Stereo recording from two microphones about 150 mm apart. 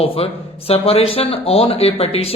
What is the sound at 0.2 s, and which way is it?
Speech, 40° left (ahead or behind).